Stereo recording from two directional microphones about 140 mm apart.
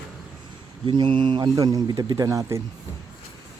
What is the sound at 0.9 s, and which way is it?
A man's voice, 35° right (ahead or behind).